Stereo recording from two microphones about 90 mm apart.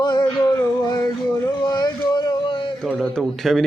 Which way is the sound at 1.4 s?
50° left (ahead or behind).